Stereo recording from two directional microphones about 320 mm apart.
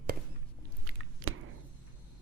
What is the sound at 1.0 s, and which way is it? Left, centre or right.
Squish, right.